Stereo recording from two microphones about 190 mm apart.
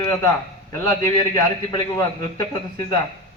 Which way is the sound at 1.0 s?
20° left (ahead or behind).